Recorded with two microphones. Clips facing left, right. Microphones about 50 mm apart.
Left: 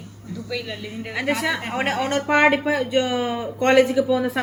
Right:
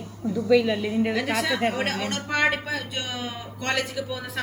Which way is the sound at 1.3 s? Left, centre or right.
Centre.